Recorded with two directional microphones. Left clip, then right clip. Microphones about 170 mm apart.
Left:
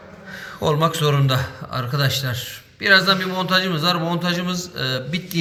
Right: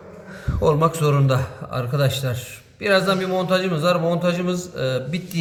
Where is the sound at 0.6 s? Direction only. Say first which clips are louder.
Right 1 dB; 10° right (ahead or behind).